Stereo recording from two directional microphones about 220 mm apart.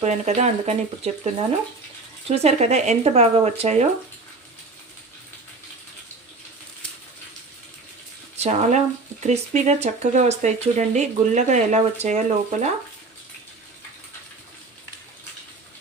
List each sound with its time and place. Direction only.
0.0 s speech: 30° right (ahead or behind)
8.4 s speech: 30° right (ahead or behind)